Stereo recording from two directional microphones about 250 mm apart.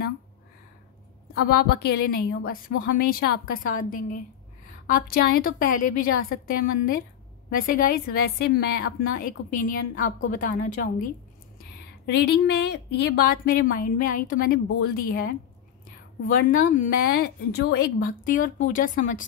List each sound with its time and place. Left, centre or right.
1.3 s a woman's voice: left
12.1 s a woman's voice: left
16.3 s a woman's voice: left